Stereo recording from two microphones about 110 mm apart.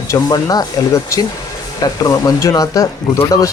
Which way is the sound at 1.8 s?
35° left (ahead or behind).